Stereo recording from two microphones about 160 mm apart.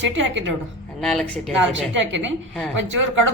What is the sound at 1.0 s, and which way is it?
Speech, 5° left (ahead or behind).